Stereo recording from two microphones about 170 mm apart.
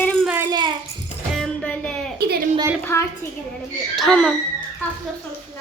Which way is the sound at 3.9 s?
5° left (ahead or behind).